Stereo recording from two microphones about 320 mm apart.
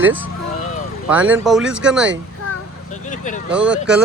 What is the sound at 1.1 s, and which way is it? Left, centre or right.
Speech, centre.